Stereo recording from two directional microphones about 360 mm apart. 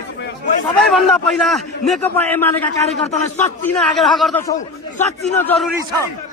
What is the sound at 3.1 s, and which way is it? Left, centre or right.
Speech, centre.